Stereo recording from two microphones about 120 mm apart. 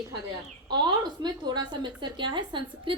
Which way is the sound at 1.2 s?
35° right (ahead or behind).